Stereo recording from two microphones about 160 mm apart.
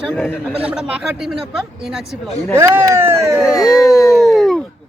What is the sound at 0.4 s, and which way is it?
Speech, 5° right (ahead or behind).